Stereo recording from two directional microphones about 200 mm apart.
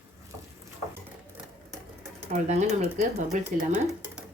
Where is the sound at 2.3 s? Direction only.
35° right (ahead or behind).